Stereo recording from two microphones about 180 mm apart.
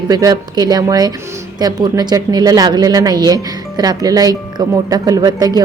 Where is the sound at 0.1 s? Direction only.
20° right (ahead or behind).